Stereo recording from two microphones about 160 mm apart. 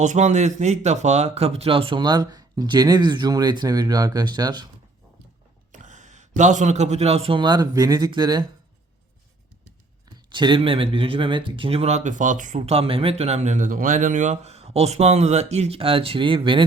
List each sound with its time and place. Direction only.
0.0 s speech: 45° right (ahead or behind); by 4.7 s 25° right (ahead or behind)
5.7 s a man's voice: 50° right (ahead or behind); by 8.4 s 25° right (ahead or behind)
10.2 s speech: 30° right (ahead or behind)